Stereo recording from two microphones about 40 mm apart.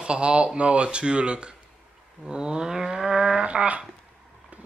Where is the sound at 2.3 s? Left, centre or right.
Centre.